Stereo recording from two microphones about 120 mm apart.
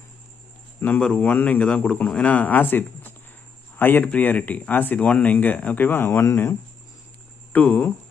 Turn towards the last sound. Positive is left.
turn(degrees=15)  # may be behind; listen again after turning